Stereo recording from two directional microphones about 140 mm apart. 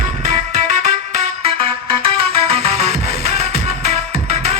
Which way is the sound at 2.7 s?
45° right (ahead or behind).